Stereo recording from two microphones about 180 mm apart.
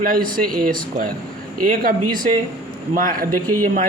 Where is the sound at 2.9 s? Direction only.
50° right (ahead or behind).